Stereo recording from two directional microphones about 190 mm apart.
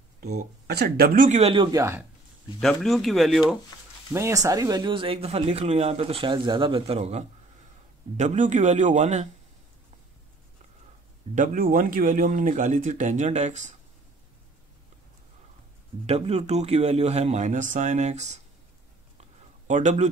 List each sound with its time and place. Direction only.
0.7 s speech: 55° right (ahead or behind)
1.4 s speech: 25° right (ahead or behind)
2.6 s speech: 5° left (ahead or behind)
4.1 s speech: 15° right (ahead or behind); by 9.3 s 35° right (ahead or behind)
11.3 s speech: 45° right (ahead or behind)
16.1 s speech: 35° right (ahead or behind)
19.7 s speech: 40° right (ahead or behind)